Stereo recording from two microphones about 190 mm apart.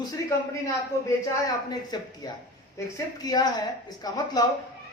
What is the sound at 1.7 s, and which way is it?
A man's voice, 20° left (ahead or behind).